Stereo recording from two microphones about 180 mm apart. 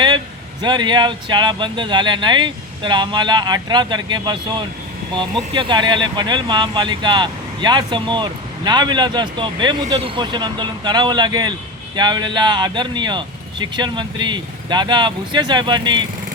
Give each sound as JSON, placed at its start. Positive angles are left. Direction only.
{"t": 0.6, "sound": "speech", "side_deg": -25}